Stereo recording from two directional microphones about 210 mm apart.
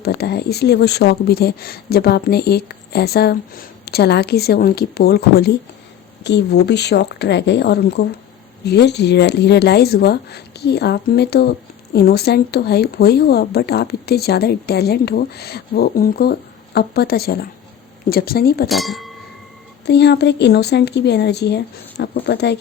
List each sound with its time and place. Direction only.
0.0 s speech: 50° left (ahead or behind)
18.7 s speech: centre (ahead or behind)
19.8 s speech: 55° left (ahead or behind)